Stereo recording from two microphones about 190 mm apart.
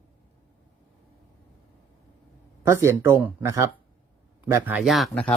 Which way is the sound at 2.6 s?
15° right (ahead or behind).